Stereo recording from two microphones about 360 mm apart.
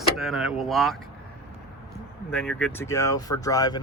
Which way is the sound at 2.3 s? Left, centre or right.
Centre.